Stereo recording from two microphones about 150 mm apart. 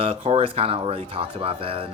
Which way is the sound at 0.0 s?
40° right (ahead or behind).